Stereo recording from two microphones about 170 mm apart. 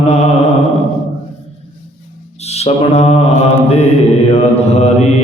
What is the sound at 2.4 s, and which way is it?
Mantra, 40° left (ahead or behind).